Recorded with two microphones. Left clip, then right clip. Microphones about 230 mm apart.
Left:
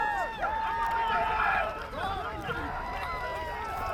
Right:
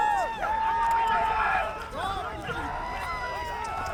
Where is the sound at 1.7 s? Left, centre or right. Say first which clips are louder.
Right 2 dB; right.